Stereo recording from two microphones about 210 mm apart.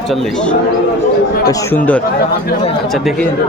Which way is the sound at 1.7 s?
10° left (ahead or behind).